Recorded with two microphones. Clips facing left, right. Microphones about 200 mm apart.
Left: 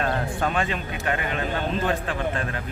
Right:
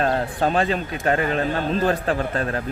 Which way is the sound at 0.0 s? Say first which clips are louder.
Right 4 dB; 35° right (ahead or behind).